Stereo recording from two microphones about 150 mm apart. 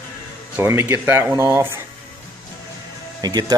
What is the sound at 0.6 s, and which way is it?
Speech, 15° right (ahead or behind).